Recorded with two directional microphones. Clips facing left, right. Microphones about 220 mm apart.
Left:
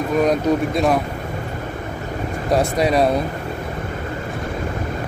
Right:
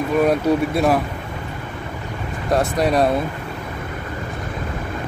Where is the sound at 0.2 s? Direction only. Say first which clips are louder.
Even; 5° right (ahead or behind).